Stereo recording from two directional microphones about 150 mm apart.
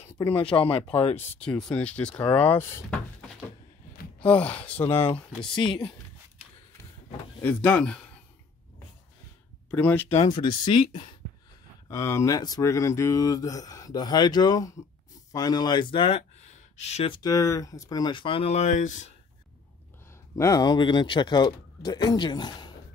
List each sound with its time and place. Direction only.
0.3 s speech: 35° left (ahead or behind)
1.1 s speech: 10° left (ahead or behind)
5.4 s speech: 35° left (ahead or behind)
7.4 s speech: 10° left (ahead or behind)
9.7 s speech: 10° left (ahead or behind)
10.2 s speech: 30° left (ahead or behind)
11.9 s speech: 20° left (ahead or behind); by 17.1 s 50° left (ahead or behind)
17.1 s speech: 25° left (ahead or behind); by 19.1 s 55° left (ahead or behind)
20.3 s speech: 25° left (ahead or behind)